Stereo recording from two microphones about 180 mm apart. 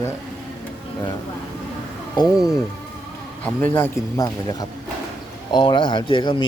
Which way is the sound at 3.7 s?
15° left (ahead or behind).